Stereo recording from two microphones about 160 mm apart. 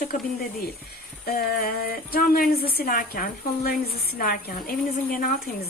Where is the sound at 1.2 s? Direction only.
65° left (ahead or behind).